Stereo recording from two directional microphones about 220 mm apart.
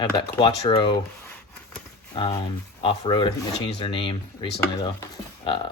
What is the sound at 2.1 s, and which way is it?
Speech, 20° left (ahead or behind).